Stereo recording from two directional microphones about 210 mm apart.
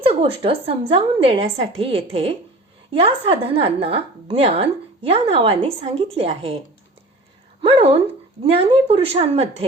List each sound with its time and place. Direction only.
0.0 s a woman's voice: 25° right (ahead or behind)
7.6 s a woman's voice: 25° right (ahead or behind)